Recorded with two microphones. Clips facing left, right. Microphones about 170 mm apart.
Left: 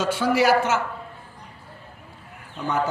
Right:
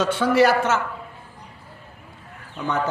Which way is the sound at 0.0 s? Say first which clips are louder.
Right 2 dB; 60° right (ahead or behind).